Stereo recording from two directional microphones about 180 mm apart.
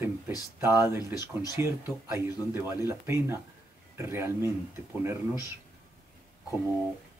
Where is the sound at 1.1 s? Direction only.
20° left (ahead or behind).